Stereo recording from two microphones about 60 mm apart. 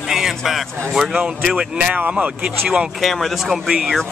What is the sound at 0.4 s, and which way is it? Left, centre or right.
Speech, centre.